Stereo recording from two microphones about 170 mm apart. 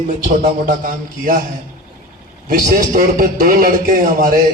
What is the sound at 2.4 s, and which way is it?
A man's voice, 50° right (ahead or behind).